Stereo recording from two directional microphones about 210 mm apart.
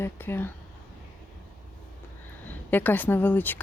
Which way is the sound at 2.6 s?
10° left (ahead or behind).